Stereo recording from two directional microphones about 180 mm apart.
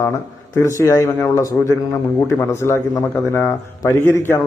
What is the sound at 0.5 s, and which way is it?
A man's voice, 15° left (ahead or behind).